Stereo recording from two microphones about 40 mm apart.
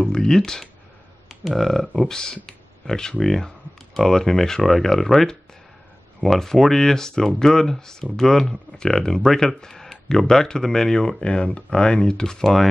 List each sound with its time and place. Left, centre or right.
0.0 s speech: centre
2.4 s a sound: centre
3.2 s speech: centre